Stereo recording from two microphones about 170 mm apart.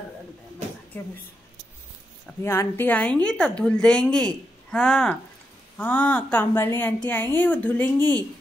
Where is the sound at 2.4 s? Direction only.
15° left (ahead or behind).